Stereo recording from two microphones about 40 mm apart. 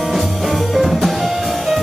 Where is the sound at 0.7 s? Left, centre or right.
Centre.